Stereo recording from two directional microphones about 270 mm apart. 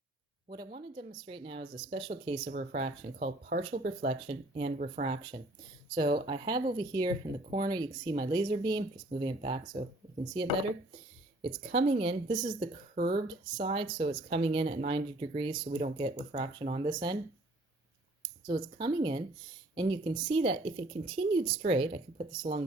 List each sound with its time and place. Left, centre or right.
0.4 s speech: centre
2.4 s speech: right
2.7 s speech: right
13.0 s speech: right
13.2 s speech: centre
18.4 s speech: centre